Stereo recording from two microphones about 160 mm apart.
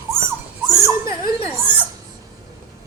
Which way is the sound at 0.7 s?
20° right (ahead or behind).